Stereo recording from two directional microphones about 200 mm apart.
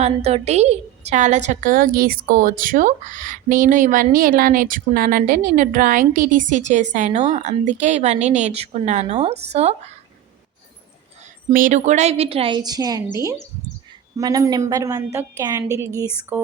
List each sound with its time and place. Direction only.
0.0 s a woman's voice: 30° right (ahead or behind)
11.5 s a woman's voice: 40° right (ahead or behind); by 16.4 s 10° right (ahead or behind)